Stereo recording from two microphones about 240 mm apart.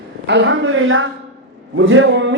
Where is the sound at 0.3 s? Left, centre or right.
Right.